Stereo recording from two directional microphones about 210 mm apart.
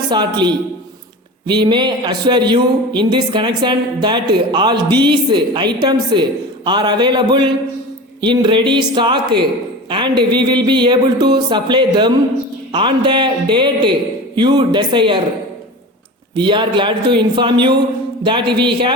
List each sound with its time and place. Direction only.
0.1 s speech: 20° right (ahead or behind)
16.3 s speech: 20° right (ahead or behind)